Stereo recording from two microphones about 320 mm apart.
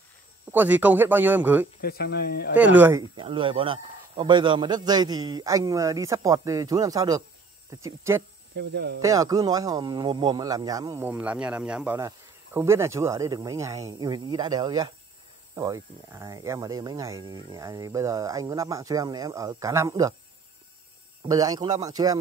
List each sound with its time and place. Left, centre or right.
0.5 s speech: centre
1.8 s speech: left
2.5 s speech: centre
8.5 s speech: right
9.0 s speech: centre
21.2 s speech: centre